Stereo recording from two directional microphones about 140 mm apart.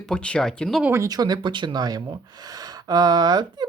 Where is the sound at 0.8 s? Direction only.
20° right (ahead or behind).